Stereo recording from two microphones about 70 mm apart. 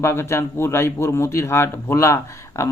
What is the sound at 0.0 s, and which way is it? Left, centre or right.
Speech, left.